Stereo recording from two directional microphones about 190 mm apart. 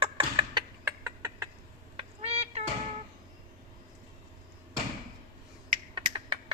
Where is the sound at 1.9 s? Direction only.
30° right (ahead or behind).